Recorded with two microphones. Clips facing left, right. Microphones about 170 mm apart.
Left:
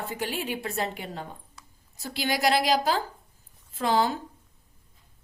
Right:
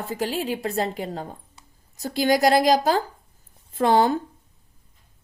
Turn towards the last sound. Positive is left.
turn(degrees=-50)  # may be behind; listen again after turning